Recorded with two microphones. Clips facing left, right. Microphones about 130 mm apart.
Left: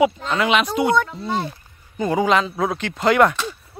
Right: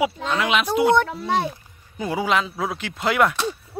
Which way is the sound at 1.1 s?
90° right.